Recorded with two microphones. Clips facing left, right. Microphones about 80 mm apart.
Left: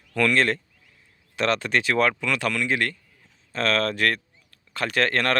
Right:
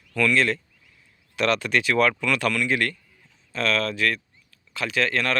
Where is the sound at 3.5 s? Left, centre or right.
Left.